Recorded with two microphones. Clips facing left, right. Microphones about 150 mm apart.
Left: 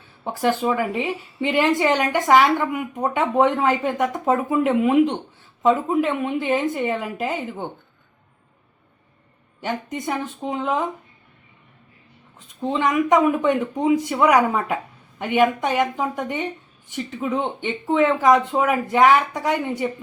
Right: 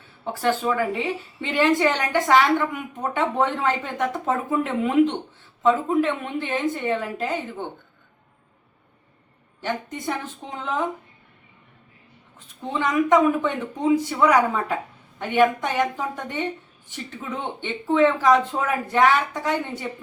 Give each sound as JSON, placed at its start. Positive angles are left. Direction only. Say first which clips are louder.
{"t": 0.4, "sound": "a woman's voice", "louder": "left 2 dB", "side_deg": 15}
{"t": 9.6, "sound": "a woman's voice", "louder": "left 2 dB", "side_deg": 15}
{"t": 12.6, "sound": "a woman's voice", "louder": "left 2 dB", "side_deg": 20}